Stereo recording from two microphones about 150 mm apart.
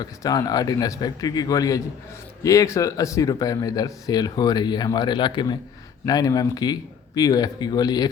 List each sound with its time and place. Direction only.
0.0 s speech: 25° left (ahead or behind)